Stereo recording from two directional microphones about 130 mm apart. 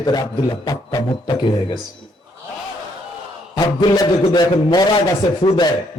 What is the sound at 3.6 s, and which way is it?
A man's voice, 30° left (ahead or behind).